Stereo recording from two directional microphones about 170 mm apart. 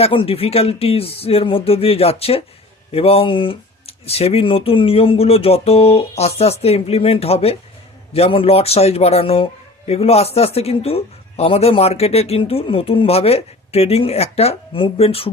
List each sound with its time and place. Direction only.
0.0 s a man's voice: 35° left (ahead or behind)